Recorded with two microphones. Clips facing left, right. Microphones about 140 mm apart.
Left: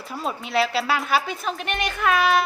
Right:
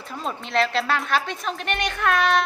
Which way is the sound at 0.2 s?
5° left (ahead or behind).